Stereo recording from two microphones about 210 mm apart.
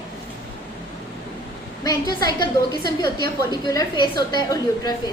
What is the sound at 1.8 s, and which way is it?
A woman's voice, 20° left (ahead or behind).